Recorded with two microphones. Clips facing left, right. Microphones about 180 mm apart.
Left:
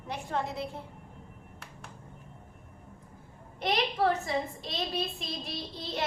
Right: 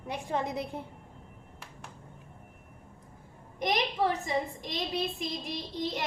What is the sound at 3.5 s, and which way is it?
A woman's voice, 15° right (ahead or behind).